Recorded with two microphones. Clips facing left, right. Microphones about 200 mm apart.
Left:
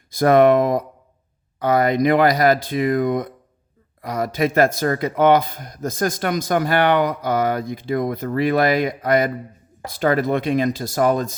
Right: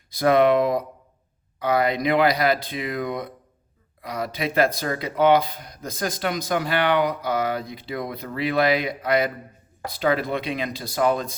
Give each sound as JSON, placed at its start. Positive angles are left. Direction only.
{"t": 0.1, "sound": "speech", "side_deg": 45}